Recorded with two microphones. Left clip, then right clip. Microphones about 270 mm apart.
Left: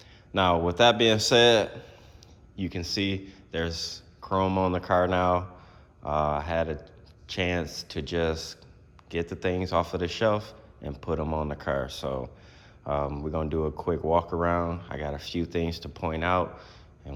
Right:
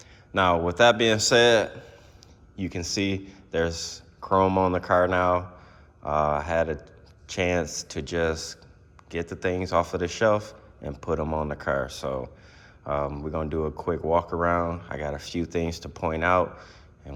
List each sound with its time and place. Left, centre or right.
0.3 s speech: centre